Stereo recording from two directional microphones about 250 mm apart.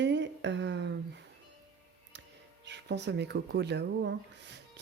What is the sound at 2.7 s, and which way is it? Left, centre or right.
Speech, right.